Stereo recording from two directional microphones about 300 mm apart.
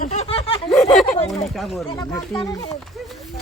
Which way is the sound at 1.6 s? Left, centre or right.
Centre.